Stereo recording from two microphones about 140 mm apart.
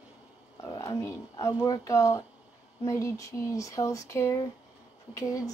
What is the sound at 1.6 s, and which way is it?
A woman's voice, 25° left (ahead or behind).